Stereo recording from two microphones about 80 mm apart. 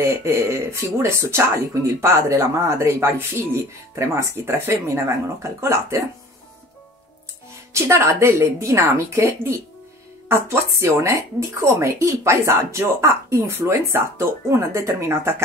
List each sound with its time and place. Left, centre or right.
0.0 s speech: right
7.7 s speech: right